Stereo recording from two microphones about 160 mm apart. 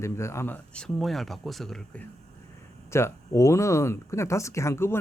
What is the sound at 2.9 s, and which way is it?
A man's voice, 15° left (ahead or behind).